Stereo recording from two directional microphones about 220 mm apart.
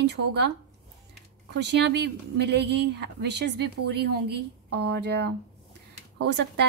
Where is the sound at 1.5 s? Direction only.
50° right (ahead or behind).